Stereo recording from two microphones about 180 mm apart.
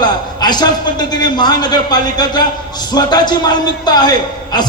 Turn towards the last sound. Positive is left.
turn(degrees=25)  # may be behind; listen again after turning